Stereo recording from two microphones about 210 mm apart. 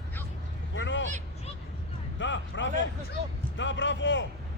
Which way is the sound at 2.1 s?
60° left (ahead or behind).